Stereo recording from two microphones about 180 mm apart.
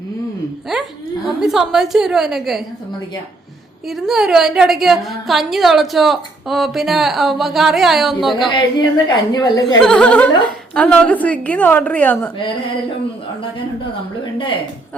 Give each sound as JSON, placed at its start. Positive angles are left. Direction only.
{"t": 1.4, "sound": "a woman's voice", "side_deg": 0}
{"t": 3.8, "sound": "a woman's voice", "side_deg": 0}
{"t": 8.4, "sound": "a woman's voice", "side_deg": 25}
{"t": 9.8, "sound": "a woman's voice", "side_deg": 5}